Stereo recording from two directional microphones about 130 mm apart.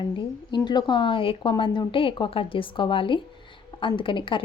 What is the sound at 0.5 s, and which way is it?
A woman's voice, 35° left (ahead or behind).